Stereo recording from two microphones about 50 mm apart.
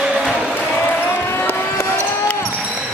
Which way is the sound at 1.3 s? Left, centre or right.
Left.